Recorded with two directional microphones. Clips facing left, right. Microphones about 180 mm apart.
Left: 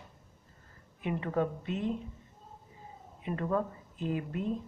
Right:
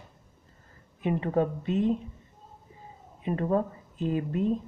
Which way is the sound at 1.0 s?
30° right (ahead or behind).